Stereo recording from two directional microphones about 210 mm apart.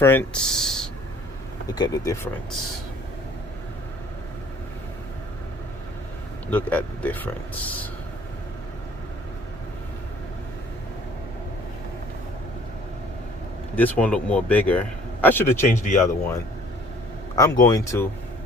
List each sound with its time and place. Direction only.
0.0 s speech: 10° left (ahead or behind)
1.7 s speech: 20° left (ahead or behind)
6.5 s speech: 10° left (ahead or behind)
13.7 s speech: 5° left (ahead or behind)